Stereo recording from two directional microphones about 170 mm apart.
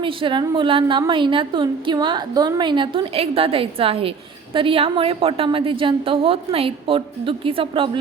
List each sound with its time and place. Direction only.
0.0 s a woman's voice: 30° right (ahead or behind)